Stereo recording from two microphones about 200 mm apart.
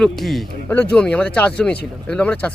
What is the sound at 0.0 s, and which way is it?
Speech, centre (ahead or behind).